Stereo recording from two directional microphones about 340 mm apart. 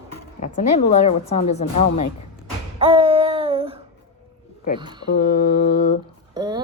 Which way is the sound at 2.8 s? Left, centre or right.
Centre.